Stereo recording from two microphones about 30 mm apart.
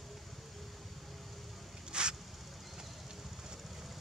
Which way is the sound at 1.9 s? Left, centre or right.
Right.